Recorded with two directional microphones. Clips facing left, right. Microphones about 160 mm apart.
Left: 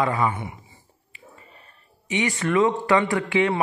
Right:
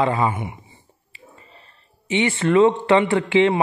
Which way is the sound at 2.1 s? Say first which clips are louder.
Right 5 dB; 25° right (ahead or behind).